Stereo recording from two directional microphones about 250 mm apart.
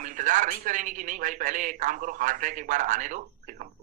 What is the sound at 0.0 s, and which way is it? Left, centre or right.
Speech, right.